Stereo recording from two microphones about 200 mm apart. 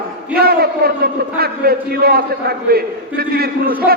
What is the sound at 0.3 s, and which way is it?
A man's voice, 50° right (ahead or behind).